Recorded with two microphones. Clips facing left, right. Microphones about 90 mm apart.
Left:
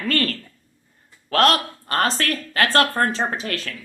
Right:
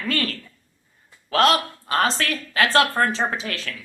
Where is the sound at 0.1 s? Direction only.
45° left (ahead or behind).